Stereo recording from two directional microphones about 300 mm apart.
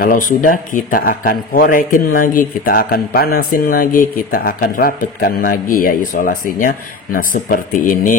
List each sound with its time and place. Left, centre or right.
0.0 s a man's voice: left